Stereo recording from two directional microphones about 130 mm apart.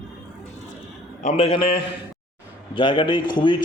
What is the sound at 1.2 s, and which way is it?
A man's voice, 50° left (ahead or behind).